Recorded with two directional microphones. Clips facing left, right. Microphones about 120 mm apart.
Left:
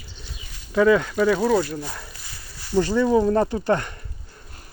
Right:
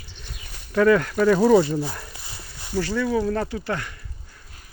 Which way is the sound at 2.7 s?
20° left (ahead or behind).